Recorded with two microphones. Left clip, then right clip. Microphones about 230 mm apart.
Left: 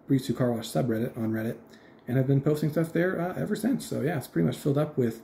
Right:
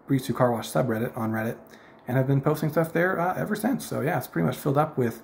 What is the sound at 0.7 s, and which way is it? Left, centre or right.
Speech, right.